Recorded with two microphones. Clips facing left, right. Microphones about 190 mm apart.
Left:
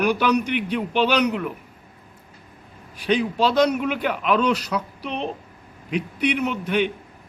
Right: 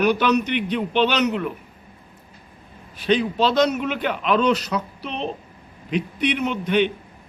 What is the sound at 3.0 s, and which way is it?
A man's voice, 10° left (ahead or behind).